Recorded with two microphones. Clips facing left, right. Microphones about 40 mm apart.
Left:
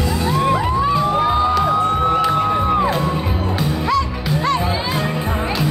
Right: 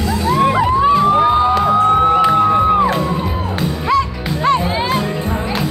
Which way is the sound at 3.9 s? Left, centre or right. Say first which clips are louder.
Right 5 dB; right.